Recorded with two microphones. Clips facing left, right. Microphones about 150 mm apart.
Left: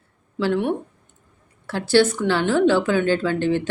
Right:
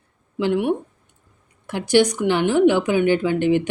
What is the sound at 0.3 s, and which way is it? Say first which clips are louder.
A woman's voice: right 1 dB; 15° right (ahead or behind).